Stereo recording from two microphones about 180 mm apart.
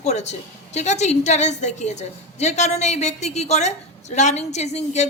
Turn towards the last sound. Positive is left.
turn(degrees=40)  # may be behind; listen again after turning